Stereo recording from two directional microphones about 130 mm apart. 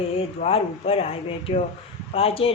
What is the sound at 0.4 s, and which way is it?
Speech, 50° left (ahead or behind).